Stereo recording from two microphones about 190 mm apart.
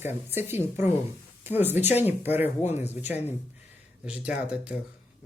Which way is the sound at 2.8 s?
35° left (ahead or behind).